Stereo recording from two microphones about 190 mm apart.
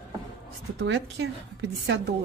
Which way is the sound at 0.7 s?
65° right (ahead or behind).